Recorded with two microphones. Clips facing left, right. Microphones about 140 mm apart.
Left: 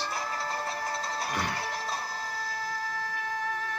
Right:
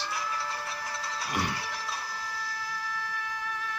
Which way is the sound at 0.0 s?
45° left (ahead or behind).